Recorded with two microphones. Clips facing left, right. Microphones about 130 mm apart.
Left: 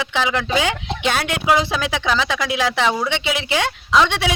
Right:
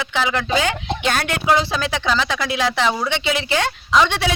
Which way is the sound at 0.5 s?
10° left (ahead or behind).